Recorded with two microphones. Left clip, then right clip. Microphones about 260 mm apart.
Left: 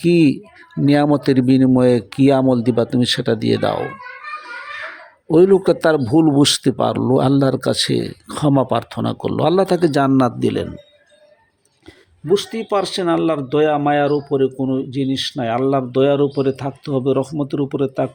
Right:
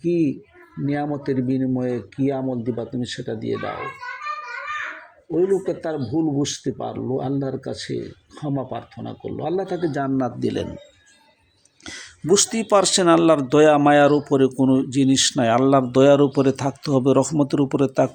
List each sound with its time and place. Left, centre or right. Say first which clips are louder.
0.0 s speech: left 7 dB; left
5.3 s speech: left 8 dB; left
11.9 s speech: left 2 dB; centre